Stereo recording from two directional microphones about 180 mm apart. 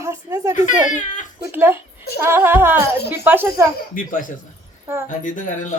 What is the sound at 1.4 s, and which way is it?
Speech, 10° right (ahead or behind).